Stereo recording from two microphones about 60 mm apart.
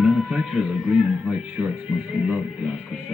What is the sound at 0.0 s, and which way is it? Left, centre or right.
Music, centre.